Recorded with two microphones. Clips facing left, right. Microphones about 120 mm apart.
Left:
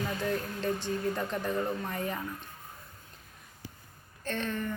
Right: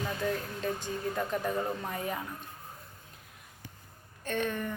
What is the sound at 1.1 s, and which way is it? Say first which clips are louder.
A woman's voice: even; 10° right (ahead or behind).